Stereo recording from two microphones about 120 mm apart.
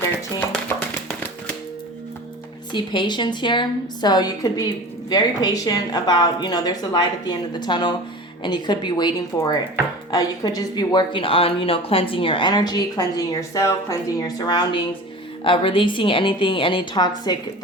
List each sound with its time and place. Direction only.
2.7 s a woman's voice: 40° left (ahead or behind)